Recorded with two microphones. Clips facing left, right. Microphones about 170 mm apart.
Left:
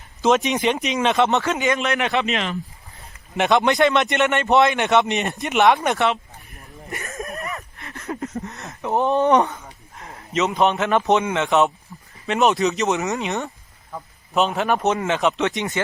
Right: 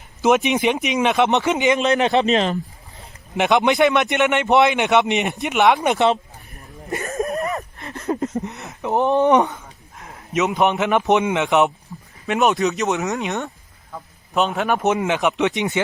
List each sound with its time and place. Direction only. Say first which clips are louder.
0.2 s a man's voice: right 2 dB; 15° right (ahead or behind)
1.2 s speech: right 3 dB; 15° right (ahead or behind)
1.9 s a man's voice: right 5 dB; 30° right (ahead or behind)
3.8 s speech: right 1 dB; 5° right (ahead or behind)
4.3 s a man's voice: right 1 dB; 15° right (ahead or behind)
5.5 s speech: even; centre (ahead or behind)
5.8 s a man's voice: right 3 dB; 20° right (ahead or behind)
6.9 s a sound: right 8 dB; 35° right (ahead or behind)
8.4 s speech: right 3 dB; 15° right (ahead or behind)
9.4 s a sound: right 1 dB; centre (ahead or behind)
10.4 s a man's voice: right 1 dB; 15° right (ahead or behind)
12.3 s speech: even; centre (ahead or behind)
14.8 s a man's voice: right 1 dB; 15° right (ahead or behind)